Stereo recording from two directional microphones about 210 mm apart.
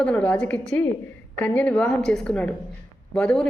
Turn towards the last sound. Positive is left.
turn(degrees=5)  # may be behind; listen again after turning